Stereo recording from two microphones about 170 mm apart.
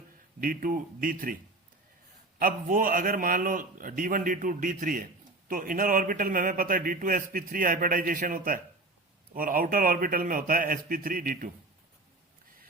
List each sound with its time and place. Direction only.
0.3 s a man's voice: 55° right (ahead or behind)
2.4 s a man's voice: 55° right (ahead or behind)